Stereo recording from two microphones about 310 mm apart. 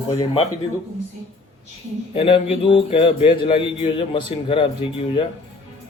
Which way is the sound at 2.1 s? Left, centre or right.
Centre.